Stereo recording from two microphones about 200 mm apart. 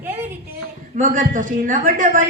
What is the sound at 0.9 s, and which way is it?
Speech, 40° right (ahead or behind).